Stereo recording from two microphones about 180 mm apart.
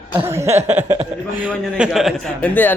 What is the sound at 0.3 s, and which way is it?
A man's voice, 15° right (ahead or behind).